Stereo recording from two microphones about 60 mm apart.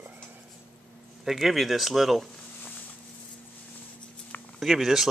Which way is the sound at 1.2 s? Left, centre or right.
Centre.